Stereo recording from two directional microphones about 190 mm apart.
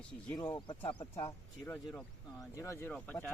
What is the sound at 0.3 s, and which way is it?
A man's voice, 20° left (ahead or behind).